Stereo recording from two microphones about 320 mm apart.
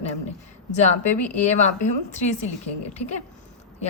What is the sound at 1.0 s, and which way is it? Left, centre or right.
A woman's voice, left.